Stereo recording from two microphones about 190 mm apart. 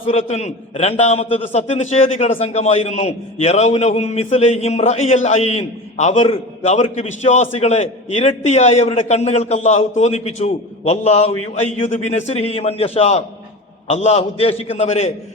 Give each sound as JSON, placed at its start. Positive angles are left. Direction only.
{"t": 0.0, "sound": "a man's voice", "side_deg": 35}